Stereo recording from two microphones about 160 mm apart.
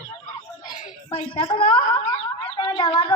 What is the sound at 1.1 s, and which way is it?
A woman's voice, 35° left (ahead or behind).